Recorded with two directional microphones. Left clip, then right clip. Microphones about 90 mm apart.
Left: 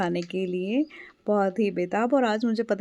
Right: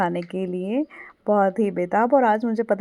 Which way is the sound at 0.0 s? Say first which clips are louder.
Right 3 dB; 25° left (ahead or behind).